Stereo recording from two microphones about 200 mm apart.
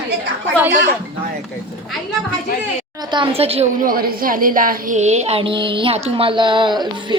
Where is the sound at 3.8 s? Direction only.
45° right (ahead or behind).